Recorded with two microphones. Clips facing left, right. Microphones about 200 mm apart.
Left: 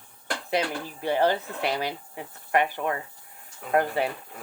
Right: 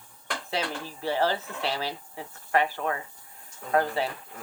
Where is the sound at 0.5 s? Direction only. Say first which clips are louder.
Left 5 dB; 15° left (ahead or behind).